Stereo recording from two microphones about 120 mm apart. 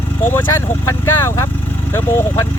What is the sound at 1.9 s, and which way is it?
Speech, 20° left (ahead or behind).